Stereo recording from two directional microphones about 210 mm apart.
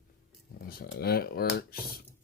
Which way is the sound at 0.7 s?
45° left (ahead or behind).